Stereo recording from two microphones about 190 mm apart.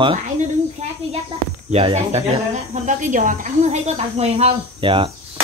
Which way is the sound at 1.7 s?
35° right (ahead or behind).